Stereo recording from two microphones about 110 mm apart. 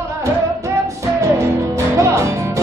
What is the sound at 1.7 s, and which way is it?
Music, 25° right (ahead or behind).